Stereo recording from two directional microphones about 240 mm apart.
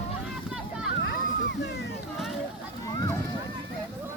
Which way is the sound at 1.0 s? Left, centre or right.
Left.